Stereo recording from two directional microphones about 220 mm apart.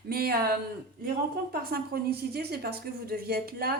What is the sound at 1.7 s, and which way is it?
A woman's voice, 45° right (ahead or behind).